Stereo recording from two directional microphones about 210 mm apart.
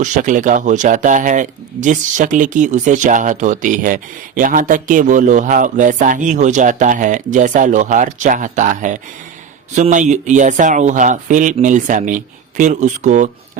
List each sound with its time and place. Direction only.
0.0 s speech: 40° right (ahead or behind)